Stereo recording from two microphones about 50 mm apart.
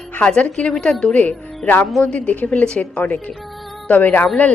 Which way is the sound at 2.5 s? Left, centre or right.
Left.